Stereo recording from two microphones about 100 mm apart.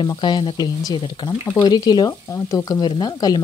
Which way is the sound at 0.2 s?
55° left (ahead or behind).